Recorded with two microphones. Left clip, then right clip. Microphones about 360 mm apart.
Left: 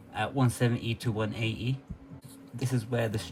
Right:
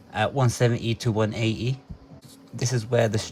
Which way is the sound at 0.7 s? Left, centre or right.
Centre.